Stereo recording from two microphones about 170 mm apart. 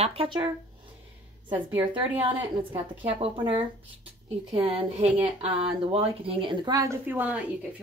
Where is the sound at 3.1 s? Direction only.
35° right (ahead or behind).